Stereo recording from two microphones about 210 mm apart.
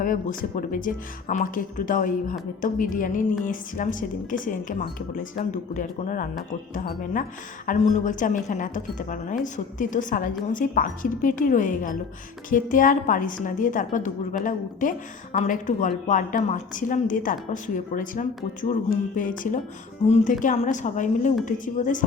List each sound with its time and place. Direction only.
0.0 s a woman's voice: 40° left (ahead or behind)